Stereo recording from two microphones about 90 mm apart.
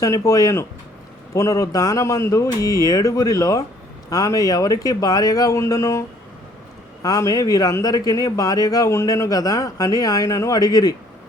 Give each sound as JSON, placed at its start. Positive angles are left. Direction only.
{"t": 0.0, "sound": "a man's voice", "side_deg": 35}